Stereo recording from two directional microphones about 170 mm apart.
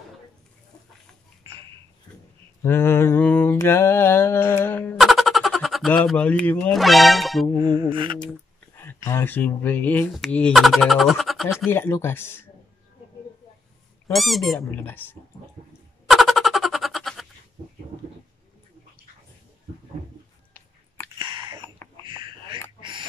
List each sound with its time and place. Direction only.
1.4 s a sound: 30° right (ahead or behind)
2.6 s mantra: 15° left (ahead or behind)
4.9 s speech: centre (ahead or behind)
7.9 s a sound: 30° right (ahead or behind)
8.7 s speech: 15° left (ahead or behind)
11.7 s speech: 15° left (ahead or behind)
14.1 s speech: centre (ahead or behind)
14.6 s speech: 10° left (ahead or behind)
16.1 s a sound: centre (ahead or behind)
21.2 s chewing: 30° right (ahead or behind)
21.8 s a sound: 10° left (ahead or behind)
22.8 s duck: 30° right (ahead or behind)